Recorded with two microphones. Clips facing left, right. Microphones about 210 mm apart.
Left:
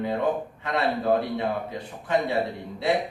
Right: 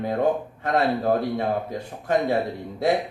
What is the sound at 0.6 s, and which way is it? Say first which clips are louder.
A man's voice: right 4 dB; 45° right (ahead or behind).